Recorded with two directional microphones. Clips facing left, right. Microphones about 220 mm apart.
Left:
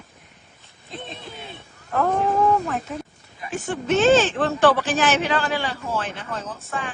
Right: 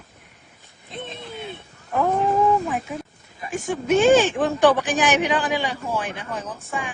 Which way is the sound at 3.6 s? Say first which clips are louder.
Right 1 dB; 10° right (ahead or behind).